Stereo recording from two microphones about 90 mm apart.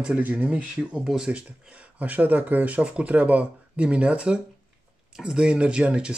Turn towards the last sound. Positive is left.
turn(degrees=-10)  # may be behind; listen again after turning